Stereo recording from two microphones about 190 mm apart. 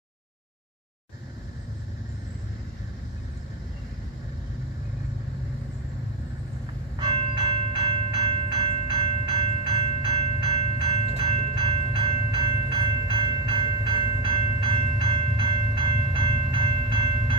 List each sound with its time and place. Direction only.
7.0 s train: 25° right (ahead or behind)